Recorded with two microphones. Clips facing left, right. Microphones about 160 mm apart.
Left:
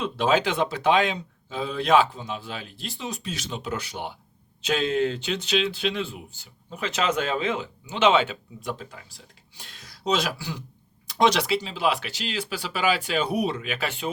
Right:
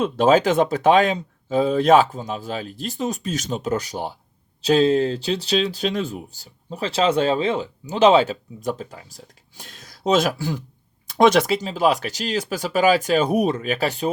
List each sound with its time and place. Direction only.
0.0 s speech: 45° right (ahead or behind)